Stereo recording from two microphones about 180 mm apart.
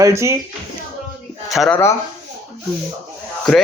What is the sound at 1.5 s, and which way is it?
Speech, centre (ahead or behind).